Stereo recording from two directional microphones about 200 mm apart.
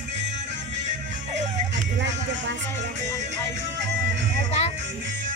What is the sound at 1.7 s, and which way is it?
Speech, 65° right (ahead or behind).